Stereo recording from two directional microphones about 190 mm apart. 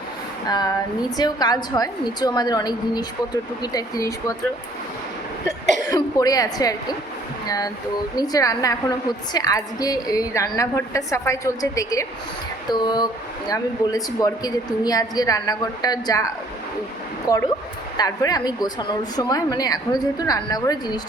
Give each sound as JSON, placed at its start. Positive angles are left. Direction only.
{"t": 0.4, "sound": "a woman's voice", "side_deg": 20}
{"t": 5.9, "sound": "a woman's voice", "side_deg": 20}
{"t": 7.4, "sound": "a sound", "side_deg": 20}
{"t": 8.1, "sound": "a woman's voice", "side_deg": 20}